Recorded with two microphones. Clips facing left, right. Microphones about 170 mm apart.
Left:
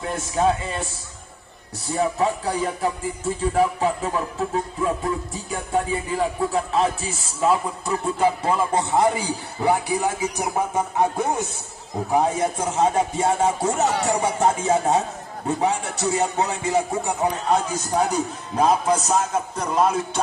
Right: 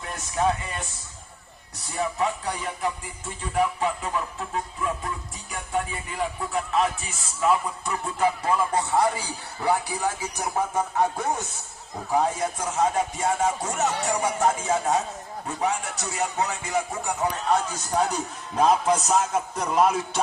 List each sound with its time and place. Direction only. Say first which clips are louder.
0.0 s speech: left 4 dB; 30° left (ahead or behind)
1.9 s music: left 5 dB; 35° left (ahead or behind)
5.5 s speech: left 5 dB; 30° left (ahead or behind)
17.5 s a man's voice: left 1 dB; 10° left (ahead or behind)